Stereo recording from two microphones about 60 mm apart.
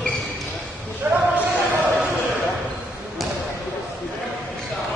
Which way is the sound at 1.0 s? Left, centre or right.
Centre.